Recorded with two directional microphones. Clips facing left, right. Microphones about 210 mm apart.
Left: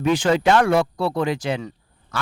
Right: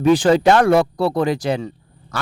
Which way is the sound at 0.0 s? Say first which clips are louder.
Right 5 dB; 35° right (ahead or behind).